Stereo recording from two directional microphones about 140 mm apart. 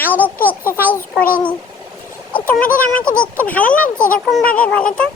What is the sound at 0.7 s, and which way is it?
Speech, 15° left (ahead or behind).